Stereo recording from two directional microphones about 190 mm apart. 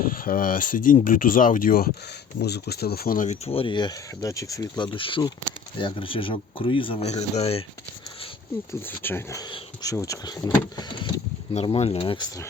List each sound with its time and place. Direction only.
0.0 s speech: 50° left (ahead or behind)
9.0 s speech: 10° left (ahead or behind)